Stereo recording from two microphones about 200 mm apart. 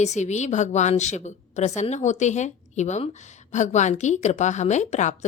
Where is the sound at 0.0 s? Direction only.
35° left (ahead or behind).